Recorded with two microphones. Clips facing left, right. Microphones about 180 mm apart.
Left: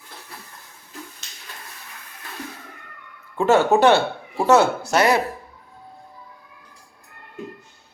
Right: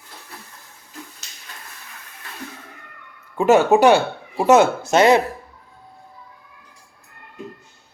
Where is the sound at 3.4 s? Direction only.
15° right (ahead or behind).